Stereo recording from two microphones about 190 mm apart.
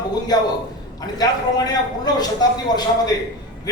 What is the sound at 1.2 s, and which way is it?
Speech, 20° left (ahead or behind).